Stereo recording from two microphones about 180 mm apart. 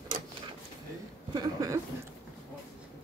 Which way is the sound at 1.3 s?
20° right (ahead or behind).